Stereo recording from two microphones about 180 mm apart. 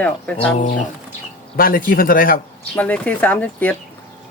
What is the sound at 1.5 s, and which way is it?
Speech, 55° left (ahead or behind).